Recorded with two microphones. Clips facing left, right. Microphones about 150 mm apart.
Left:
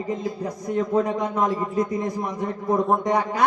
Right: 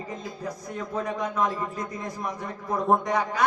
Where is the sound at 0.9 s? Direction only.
20° left (ahead or behind).